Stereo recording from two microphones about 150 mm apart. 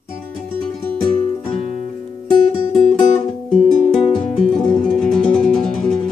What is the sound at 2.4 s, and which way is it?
Music, 55° left (ahead or behind).